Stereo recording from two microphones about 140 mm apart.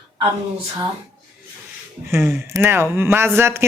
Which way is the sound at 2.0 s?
20° right (ahead or behind).